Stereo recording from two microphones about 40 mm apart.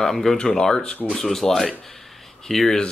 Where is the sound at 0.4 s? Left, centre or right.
Centre.